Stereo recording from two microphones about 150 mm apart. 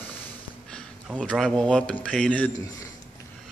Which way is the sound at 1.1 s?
5° left (ahead or behind).